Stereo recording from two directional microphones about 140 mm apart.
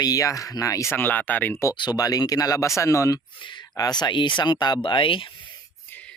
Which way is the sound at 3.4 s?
35° left (ahead or behind).